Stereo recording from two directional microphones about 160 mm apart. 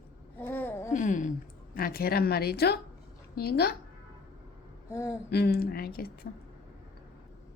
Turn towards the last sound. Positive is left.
turn(degrees=70)  # may be behind; listen again after turning